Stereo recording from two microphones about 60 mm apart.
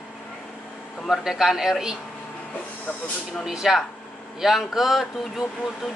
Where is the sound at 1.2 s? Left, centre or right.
Centre.